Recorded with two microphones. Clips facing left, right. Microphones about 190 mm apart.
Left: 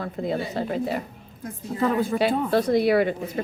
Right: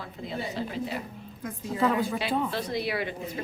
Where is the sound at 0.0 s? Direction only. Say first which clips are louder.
Left 8 dB; 50° left (ahead or behind).